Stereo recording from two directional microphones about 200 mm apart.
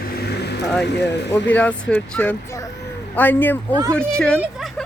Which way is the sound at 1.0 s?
60° left (ahead or behind).